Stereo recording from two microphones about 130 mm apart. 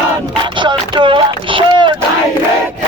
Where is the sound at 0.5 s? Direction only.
40° right (ahead or behind).